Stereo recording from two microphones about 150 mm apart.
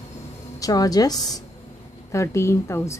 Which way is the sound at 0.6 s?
25° left (ahead or behind).